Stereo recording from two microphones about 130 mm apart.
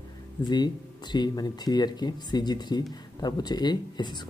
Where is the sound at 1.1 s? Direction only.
35° left (ahead or behind).